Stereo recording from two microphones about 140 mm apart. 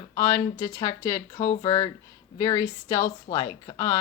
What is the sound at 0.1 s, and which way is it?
Speech, 20° left (ahead or behind).